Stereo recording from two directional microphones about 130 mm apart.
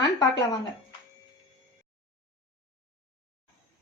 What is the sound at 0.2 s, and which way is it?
Speech, 30° left (ahead or behind).